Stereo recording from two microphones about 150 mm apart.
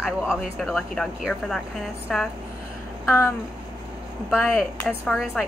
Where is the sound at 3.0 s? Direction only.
20° left (ahead or behind).